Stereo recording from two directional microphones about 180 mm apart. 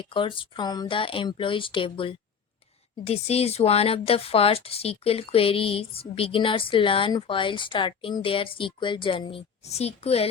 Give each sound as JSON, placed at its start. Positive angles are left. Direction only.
{"t": 0.0, "sound": "speech", "side_deg": 30}